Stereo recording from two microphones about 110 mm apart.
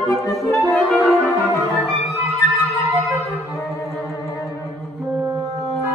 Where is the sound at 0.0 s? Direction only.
35° left (ahead or behind).